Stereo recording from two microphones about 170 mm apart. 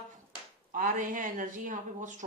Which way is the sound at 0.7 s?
50° right (ahead or behind).